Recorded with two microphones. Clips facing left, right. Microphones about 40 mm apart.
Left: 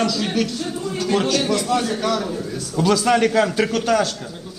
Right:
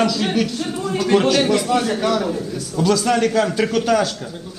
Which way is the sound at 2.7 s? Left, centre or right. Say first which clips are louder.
Even; centre.